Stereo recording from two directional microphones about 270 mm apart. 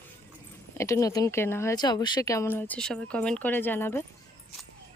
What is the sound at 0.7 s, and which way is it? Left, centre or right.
Speech, centre.